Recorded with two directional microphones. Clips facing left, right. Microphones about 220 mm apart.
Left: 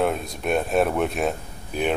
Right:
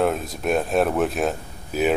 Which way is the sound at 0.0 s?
Centre (ahead or behind).